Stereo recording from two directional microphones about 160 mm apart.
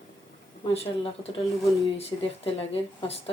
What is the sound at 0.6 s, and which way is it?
Speech, 35° left (ahead or behind).